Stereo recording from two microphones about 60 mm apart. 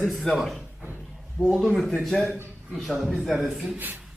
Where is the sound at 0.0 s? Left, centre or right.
Centre.